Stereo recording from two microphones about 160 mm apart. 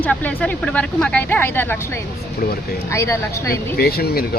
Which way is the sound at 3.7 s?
70° left (ahead or behind).